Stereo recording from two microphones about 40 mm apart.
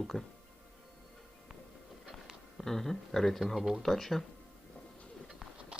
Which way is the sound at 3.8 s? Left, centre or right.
Centre.